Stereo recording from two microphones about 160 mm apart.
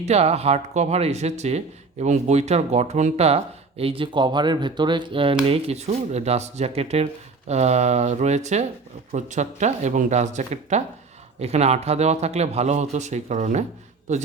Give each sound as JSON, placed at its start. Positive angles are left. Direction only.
{"t": 0.0, "sound": "speech", "side_deg": -40}